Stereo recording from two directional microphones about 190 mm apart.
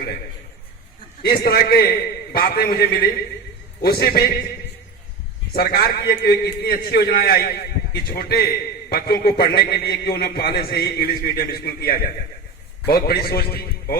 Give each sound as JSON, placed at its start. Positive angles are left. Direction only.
{"t": 1.2, "sound": "a man's voice", "side_deg": 55}
{"t": 5.5, "sound": "a man's voice", "side_deg": 50}